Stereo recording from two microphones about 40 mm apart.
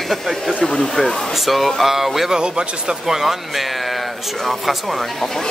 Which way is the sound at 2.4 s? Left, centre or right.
Right.